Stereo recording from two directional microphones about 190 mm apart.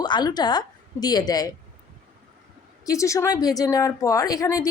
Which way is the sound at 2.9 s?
15° left (ahead or behind).